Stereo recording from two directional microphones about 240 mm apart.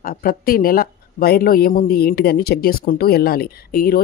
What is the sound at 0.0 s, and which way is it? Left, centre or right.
Speech, left.